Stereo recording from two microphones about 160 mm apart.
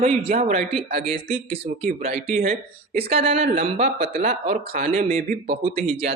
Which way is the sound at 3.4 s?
60° right (ahead or behind).